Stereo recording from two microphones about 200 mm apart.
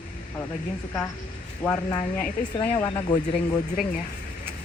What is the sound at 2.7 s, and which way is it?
Speech, 20° left (ahead or behind).